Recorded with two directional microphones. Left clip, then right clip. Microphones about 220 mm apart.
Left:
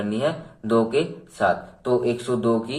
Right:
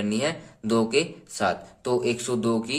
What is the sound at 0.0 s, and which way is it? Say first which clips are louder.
Speech: left 3 dB; 25° right (ahead or behind).